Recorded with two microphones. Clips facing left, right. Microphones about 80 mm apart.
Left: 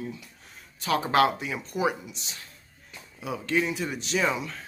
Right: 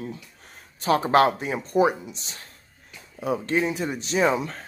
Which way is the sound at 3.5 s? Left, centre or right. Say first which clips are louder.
Left 1 dB; right.